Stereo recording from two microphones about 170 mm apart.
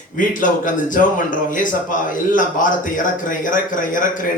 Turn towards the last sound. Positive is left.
turn(degrees=50)  # may be behind; listen again after turning